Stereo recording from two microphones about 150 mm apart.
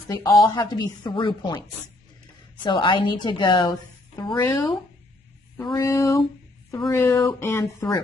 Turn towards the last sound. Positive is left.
turn(degrees=15)  # may be behind; listen again after turning